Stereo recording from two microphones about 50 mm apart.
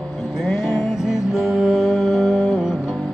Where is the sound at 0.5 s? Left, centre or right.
Centre.